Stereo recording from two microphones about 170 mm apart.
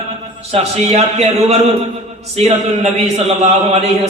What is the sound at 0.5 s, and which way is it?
A man's voice, 40° right (ahead or behind).